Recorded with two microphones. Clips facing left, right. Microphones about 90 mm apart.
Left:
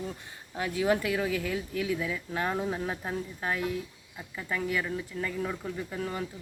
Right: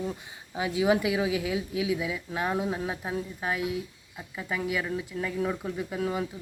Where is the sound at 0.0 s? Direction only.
10° right (ahead or behind).